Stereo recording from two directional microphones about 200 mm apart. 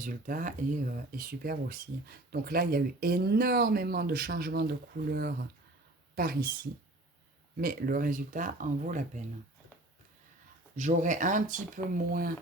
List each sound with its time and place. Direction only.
0.0 s speech: 40° right (ahead or behind)
7.5 s speech: 45° right (ahead or behind)
10.8 s speech: 40° right (ahead or behind)